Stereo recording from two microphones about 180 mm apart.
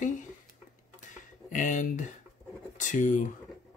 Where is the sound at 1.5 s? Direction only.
45° left (ahead or behind).